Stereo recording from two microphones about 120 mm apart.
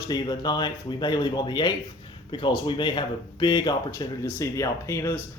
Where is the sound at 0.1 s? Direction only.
35° left (ahead or behind).